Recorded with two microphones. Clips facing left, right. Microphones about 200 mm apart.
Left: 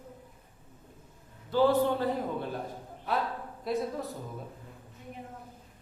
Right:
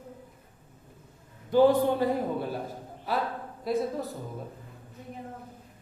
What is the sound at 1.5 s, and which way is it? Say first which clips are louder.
Speech: right 4 dB; 15° right (ahead or behind).